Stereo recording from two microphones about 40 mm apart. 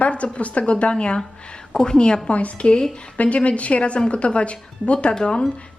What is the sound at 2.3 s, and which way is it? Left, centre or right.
A woman's voice, left.